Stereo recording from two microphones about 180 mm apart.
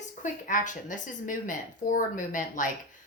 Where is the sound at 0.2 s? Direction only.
45° left (ahead or behind).